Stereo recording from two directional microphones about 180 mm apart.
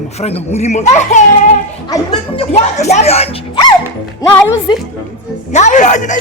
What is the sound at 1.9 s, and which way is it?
Speech, 25° left (ahead or behind).